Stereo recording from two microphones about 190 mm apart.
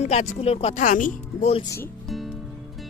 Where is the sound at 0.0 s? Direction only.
35° left (ahead or behind).